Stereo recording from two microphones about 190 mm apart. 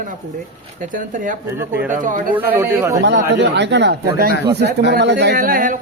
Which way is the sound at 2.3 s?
10° right (ahead or behind).